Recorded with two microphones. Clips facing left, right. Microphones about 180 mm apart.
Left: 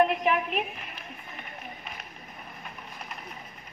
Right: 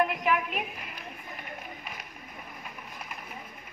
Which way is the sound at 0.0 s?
25° left (ahead or behind).